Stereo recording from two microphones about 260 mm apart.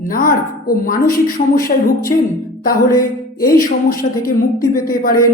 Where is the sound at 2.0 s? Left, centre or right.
Centre.